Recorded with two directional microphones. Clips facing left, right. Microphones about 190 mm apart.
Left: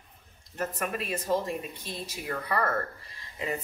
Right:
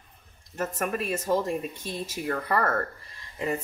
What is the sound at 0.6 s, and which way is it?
A woman's voice, 45° right (ahead or behind).